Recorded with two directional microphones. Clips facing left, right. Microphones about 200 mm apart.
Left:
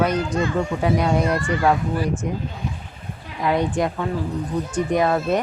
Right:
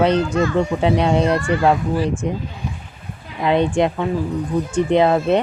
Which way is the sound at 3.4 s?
25° right (ahead or behind).